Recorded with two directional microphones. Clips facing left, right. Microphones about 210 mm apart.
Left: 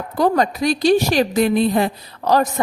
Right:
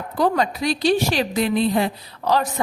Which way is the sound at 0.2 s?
45° left (ahead or behind).